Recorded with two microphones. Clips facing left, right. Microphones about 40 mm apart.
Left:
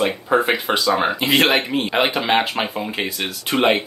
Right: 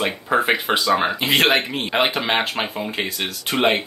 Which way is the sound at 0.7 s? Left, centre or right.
Centre.